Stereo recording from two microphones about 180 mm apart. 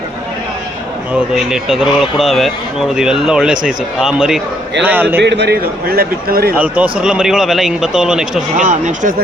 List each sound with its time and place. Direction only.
1.3 s a man's voice: 5° right (ahead or behind)
5.2 s a man's voice: 75° right (ahead or behind); by 6.5 s 55° right (ahead or behind)
6.6 s speech: 5° right (ahead or behind)
8.5 s speech: 40° right (ahead or behind)